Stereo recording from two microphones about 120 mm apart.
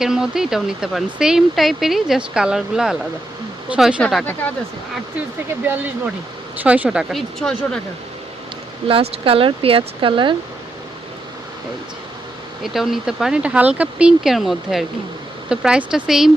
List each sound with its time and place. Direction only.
0.0 s speech: 5° right (ahead or behind)
5.6 s speech: 15° right (ahead or behind)
7.1 s speech: centre (ahead or behind)
8.9 s speech: 50° right (ahead or behind)
12.6 s speech: 5° right (ahead or behind)